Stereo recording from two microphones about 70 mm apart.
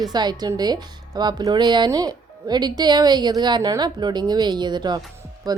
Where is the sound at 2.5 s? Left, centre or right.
Right.